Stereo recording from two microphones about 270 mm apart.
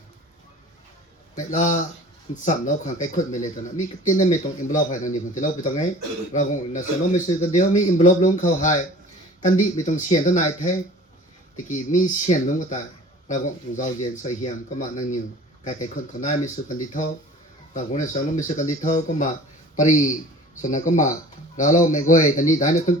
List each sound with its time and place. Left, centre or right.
1.5 s speech: left
17.7 s speech: left